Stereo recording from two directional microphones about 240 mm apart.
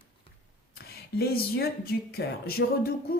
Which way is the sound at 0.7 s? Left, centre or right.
Left.